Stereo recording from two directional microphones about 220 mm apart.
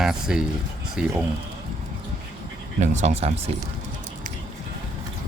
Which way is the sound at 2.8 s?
30° right (ahead or behind).